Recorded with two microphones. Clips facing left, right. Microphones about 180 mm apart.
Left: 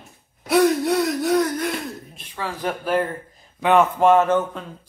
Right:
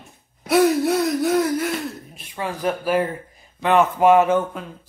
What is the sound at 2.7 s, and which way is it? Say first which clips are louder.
Speech: right 2 dB; 5° right (ahead or behind).